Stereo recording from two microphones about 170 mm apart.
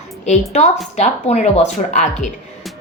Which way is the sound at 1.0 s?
40° left (ahead or behind).